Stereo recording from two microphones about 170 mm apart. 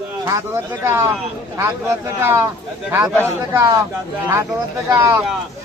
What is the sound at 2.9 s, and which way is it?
Speech, 20° right (ahead or behind).